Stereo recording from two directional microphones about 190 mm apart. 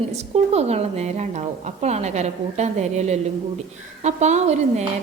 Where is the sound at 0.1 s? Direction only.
35° right (ahead or behind).